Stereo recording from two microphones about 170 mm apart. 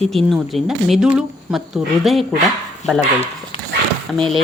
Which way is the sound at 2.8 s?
40° left (ahead or behind).